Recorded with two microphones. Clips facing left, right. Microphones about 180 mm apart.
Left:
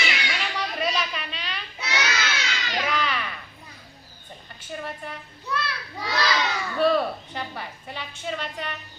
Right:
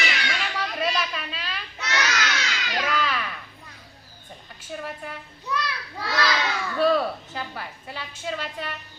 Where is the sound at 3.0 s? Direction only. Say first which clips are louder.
Right 1 dB; 5° right (ahead or behind).